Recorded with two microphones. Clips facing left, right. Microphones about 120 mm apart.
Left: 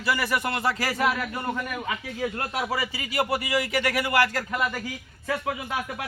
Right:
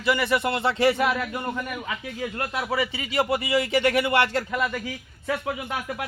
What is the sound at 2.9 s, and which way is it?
Speech, 25° right (ahead or behind).